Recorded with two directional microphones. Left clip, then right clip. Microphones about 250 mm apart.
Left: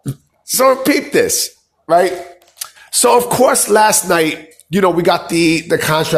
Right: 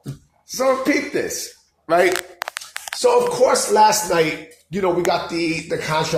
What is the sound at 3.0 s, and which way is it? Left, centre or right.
Speech, left.